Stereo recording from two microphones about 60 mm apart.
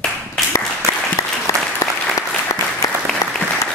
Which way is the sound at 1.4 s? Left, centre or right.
Left.